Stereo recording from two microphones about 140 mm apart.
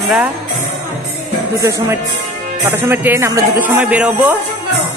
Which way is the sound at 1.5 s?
20° right (ahead or behind).